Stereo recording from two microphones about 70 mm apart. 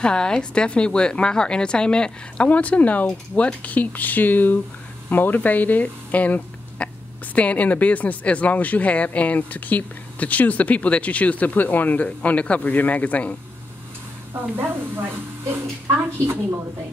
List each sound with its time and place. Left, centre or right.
0.0 s a woman's voice: centre
14.3 s speech: right